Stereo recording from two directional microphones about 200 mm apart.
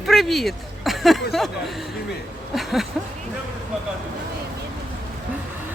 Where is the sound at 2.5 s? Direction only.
Centre (ahead or behind).